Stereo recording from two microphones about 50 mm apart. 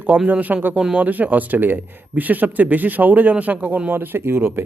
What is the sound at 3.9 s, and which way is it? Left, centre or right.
Speech, right.